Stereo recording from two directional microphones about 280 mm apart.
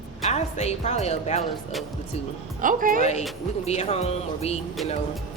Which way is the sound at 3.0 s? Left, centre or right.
Left.